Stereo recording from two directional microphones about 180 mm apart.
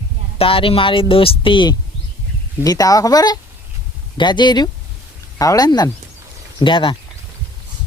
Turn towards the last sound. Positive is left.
turn(degrees=25)  # may be behind; listen again after turning